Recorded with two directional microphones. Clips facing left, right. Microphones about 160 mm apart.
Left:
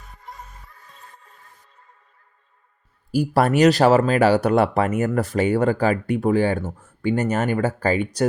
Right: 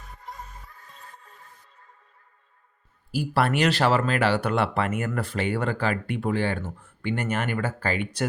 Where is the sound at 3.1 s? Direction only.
40° left (ahead or behind).